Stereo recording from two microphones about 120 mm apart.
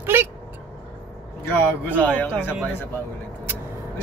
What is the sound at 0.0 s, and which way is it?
Vehicle, 20° right (ahead or behind).